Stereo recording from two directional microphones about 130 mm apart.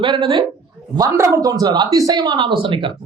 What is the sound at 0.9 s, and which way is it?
Speech, 25° right (ahead or behind).